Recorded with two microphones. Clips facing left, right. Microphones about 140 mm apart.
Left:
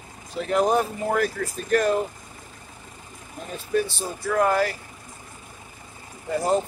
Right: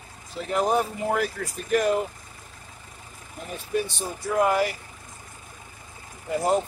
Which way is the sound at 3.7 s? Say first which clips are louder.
Left 3 dB; 20° right (ahead or behind).